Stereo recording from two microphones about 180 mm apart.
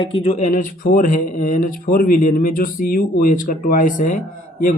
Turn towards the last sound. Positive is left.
turn(degrees=45)  # may be behind; listen again after turning